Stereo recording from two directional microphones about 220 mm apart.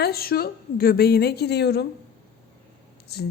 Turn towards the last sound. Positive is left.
turn(degrees=50)  # may be behind; listen again after turning